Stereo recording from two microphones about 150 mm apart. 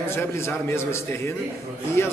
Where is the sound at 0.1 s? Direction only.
15° left (ahead or behind).